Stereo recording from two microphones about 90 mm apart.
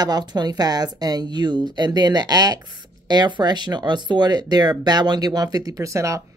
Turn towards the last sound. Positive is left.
turn(degrees=-35)  # may be behind; listen again after turning